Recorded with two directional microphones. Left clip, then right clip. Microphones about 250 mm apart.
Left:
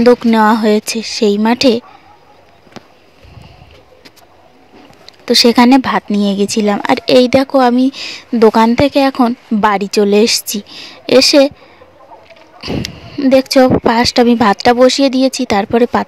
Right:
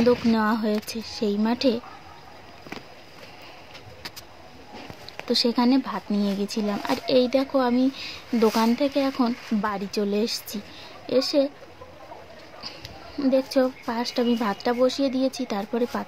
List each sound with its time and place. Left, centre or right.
0.0 s speech: left
5.0 s speech: left
12.5 s speech: left